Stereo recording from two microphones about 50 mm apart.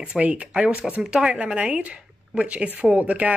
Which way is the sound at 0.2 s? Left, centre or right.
Right.